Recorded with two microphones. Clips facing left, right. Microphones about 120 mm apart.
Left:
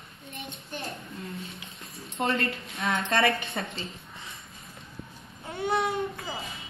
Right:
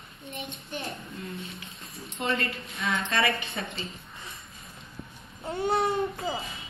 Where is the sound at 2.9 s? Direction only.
55° left (ahead or behind).